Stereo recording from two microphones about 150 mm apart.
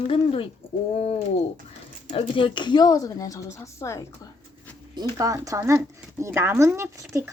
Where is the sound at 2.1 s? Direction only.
35° left (ahead or behind); by 4.0 s 20° left (ahead or behind).